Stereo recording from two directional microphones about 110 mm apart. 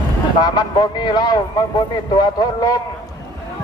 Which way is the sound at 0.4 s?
40° left (ahead or behind).